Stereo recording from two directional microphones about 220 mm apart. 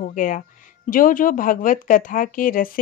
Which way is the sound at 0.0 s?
35° left (ahead or behind).